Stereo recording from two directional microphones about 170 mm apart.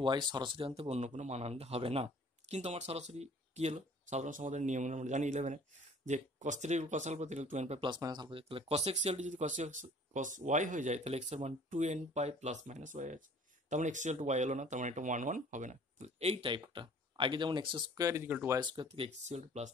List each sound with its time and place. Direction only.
0.0 s speech: 25° right (ahead or behind)
7.9 s speech: 25° right (ahead or behind)
18.6 s speech: 30° right (ahead or behind)